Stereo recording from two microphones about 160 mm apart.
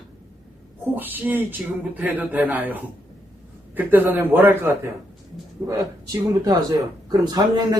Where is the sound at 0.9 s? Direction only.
10° right (ahead or behind).